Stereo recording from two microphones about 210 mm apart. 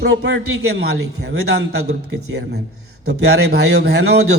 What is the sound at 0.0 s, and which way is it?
A man's voice, 55° right (ahead or behind).